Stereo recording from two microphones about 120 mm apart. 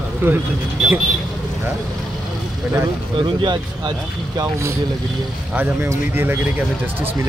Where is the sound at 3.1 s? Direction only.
40° right (ahead or behind).